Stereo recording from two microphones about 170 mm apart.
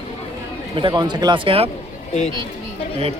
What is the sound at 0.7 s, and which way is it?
Speech, 25° right (ahead or behind).